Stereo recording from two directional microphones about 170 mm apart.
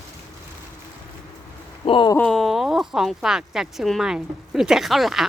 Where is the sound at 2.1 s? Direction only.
5° left (ahead or behind).